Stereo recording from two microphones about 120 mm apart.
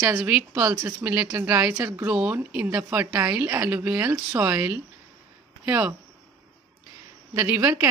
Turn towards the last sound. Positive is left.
turn(degrees=-15)  # may be behind; listen again after turning